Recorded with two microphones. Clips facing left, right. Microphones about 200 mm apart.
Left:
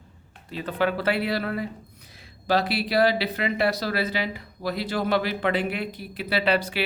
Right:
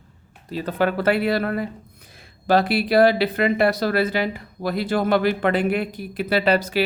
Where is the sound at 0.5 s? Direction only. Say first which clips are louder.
Right 3 dB; 45° right (ahead or behind).